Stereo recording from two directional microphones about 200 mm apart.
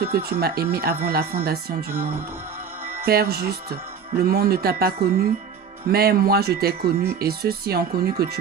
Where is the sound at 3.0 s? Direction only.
50° right (ahead or behind).